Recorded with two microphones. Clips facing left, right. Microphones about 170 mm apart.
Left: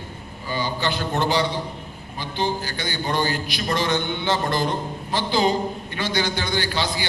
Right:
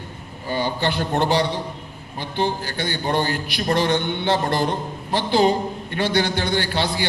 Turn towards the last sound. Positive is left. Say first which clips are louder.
# right 2 dB
turn(degrees=-60)  # may be behind; listen again after turning